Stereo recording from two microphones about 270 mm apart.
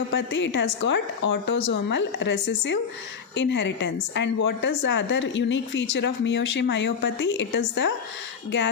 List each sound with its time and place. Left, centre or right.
0.1 s a woman's voice: left